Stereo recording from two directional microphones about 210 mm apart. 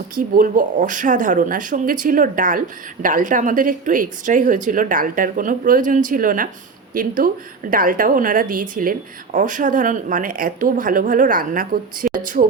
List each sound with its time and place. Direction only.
0.2 s speech: 40° right (ahead or behind)